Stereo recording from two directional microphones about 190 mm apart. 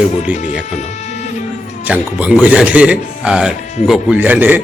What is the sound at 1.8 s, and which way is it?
A man's voice, 5° right (ahead or behind).